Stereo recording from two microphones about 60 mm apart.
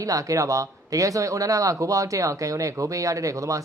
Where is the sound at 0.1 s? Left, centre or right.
Right.